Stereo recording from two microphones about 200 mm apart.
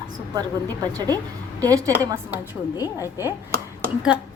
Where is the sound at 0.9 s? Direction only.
20° right (ahead or behind).